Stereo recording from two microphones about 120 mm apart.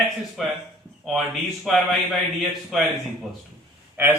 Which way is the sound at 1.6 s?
Centre (ahead or behind).